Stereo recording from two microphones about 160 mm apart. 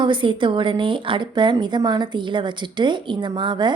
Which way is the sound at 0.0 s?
30° right (ahead or behind).